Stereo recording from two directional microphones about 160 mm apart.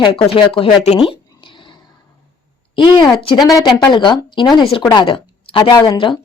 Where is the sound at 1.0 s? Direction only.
30° left (ahead or behind).